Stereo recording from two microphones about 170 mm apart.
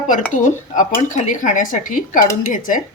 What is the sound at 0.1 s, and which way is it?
Speech, 50° left (ahead or behind).